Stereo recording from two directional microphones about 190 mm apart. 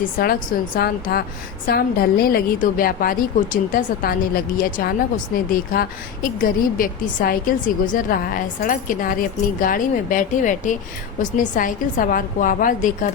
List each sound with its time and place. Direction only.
0.2 s a woman's voice: 50° left (ahead or behind)